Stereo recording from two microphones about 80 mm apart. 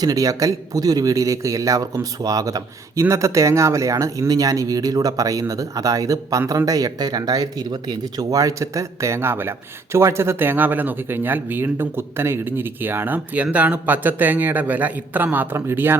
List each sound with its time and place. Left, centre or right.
0.0 s a man's voice: right